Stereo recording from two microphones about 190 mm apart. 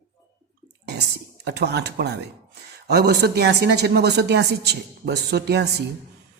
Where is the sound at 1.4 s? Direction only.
60° right (ahead or behind).